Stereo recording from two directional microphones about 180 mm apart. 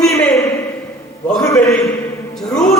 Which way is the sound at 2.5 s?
5° left (ahead or behind).